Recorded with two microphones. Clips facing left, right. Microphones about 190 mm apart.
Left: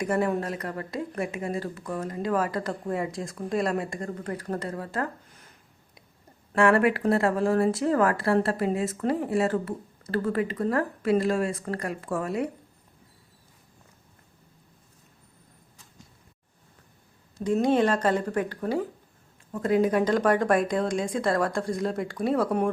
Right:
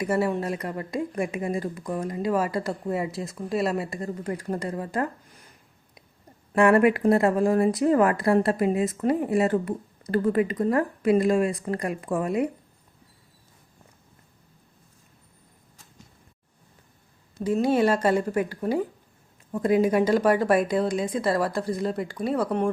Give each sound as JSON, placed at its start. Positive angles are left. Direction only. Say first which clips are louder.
{"t": 0.0, "sound": "a woman's voice", "louder": "right 1 dB", "side_deg": -5}
{"t": 6.5, "sound": "a woman's voice", "louder": "right 3 dB", "side_deg": -15}
{"t": 17.4, "sound": "a woman's voice", "louder": "right 1 dB", "side_deg": -5}